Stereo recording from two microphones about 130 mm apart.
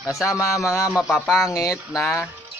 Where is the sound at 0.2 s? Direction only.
25° left (ahead or behind).